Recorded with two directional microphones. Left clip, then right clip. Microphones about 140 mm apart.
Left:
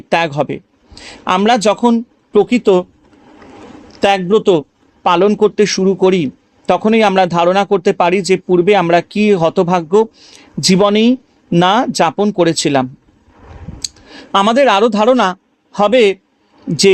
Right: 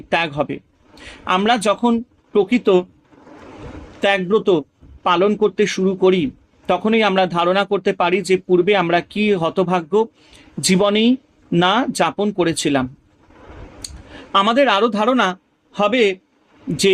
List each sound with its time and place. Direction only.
0.1 s a man's voice: 45° left (ahead or behind)
4.0 s a man's voice: 40° left (ahead or behind)
14.3 s a man's voice: 40° left (ahead or behind)